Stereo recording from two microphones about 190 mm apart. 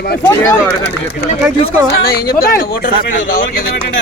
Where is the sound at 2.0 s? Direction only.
55° left (ahead or behind).